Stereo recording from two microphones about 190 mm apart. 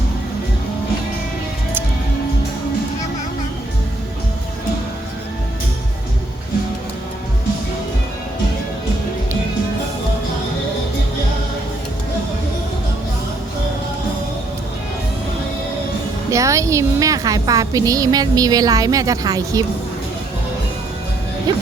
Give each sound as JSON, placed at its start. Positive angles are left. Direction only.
{"t": 16.3, "sound": "a woman's voice", "side_deg": -15}